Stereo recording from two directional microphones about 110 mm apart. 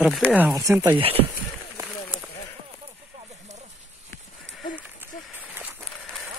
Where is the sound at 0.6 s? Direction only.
30° right (ahead or behind).